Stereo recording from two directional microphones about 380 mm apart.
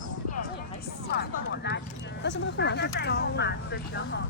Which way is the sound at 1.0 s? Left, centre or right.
Left.